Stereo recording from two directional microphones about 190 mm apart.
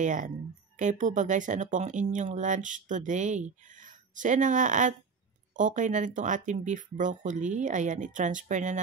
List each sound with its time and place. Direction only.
0.0 s speech: 40° right (ahead or behind)